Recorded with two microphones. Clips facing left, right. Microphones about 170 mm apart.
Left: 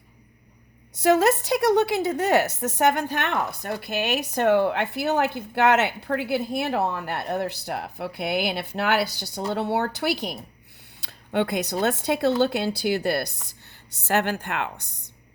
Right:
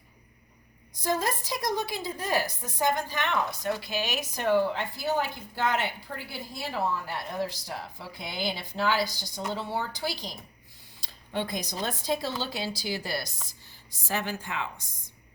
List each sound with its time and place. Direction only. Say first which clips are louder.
1.0 s a woman's voice: left 10 dB; 75° left (ahead or behind)